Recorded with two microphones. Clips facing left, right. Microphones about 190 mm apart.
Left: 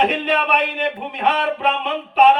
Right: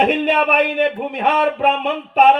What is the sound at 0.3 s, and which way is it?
A man's voice, 50° right (ahead or behind).